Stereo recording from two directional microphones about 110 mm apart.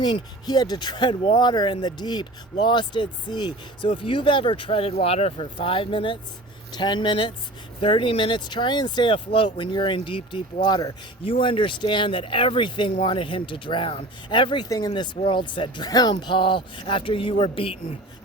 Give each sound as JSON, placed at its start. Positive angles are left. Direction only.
{"t": 0.0, "sound": "speech", "side_deg": 40}
{"t": 6.7, "sound": "speech", "side_deg": 40}
{"t": 10.6, "sound": "speech", "side_deg": 40}
{"t": 11.3, "sound": "speech", "side_deg": 55}